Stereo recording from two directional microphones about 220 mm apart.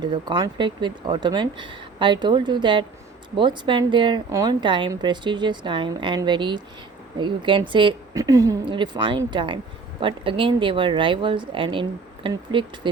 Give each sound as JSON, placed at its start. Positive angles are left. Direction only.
{"t": 0.0, "sound": "a woman's voice", "side_deg": -20}